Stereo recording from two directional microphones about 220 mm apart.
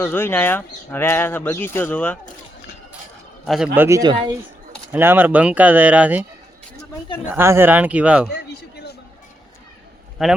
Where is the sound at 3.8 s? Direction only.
15° right (ahead or behind).